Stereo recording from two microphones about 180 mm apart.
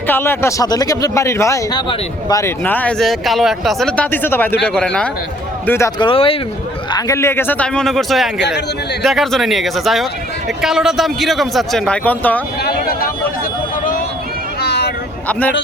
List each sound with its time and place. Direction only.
0.1 s a man's voice: 15° left (ahead or behind)
6.0 s speech: 30° left (ahead or behind)
6.9 s a man's voice: 15° left (ahead or behind)
12.6 s speech: 55° left (ahead or behind)
14.6 s vehicle: 70° left (ahead or behind)
15.3 s speech: 10° left (ahead or behind)